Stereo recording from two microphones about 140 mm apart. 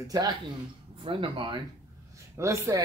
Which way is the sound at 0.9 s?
40° right (ahead or behind).